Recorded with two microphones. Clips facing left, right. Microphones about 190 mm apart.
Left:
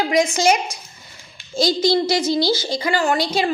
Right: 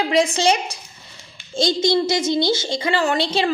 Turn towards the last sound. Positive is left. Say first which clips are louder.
# even
turn(degrees=-30)  # may be behind; listen again after turning